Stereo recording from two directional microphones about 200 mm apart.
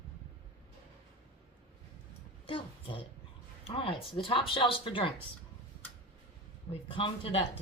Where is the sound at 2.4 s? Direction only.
25° left (ahead or behind).